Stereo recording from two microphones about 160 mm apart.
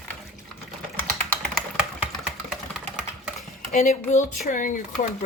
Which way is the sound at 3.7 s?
45° left (ahead or behind).